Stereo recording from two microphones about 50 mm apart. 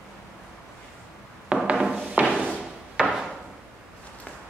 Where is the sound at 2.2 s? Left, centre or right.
Right.